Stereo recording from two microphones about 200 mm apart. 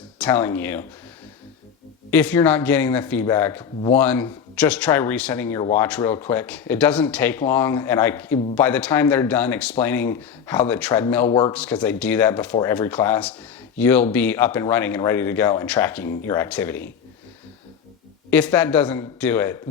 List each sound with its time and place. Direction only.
0.2 s speech: 10° left (ahead or behind)
2.0 s speech: 10° left (ahead or behind)
3.6 s speech: 25° left (ahead or behind)
3.9 s speech: 10° left (ahead or behind)
11.3 s speech: 25° left (ahead or behind)
11.5 s speech: 5° left (ahead or behind)
18.3 s speech: 10° left (ahead or behind)